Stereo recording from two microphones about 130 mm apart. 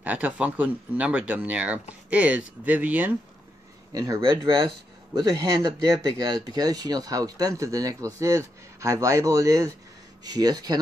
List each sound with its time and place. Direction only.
0.0 s speech: 10° right (ahead or behind)
3.9 s speech: 25° right (ahead or behind)